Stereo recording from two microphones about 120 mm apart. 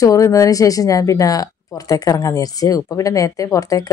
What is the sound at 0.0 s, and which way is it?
Speech, 30° left (ahead or behind).